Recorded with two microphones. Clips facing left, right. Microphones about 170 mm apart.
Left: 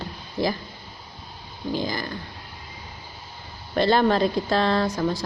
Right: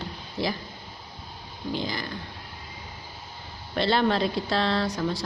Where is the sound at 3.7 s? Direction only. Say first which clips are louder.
Left 4 dB; 45° left (ahead or behind).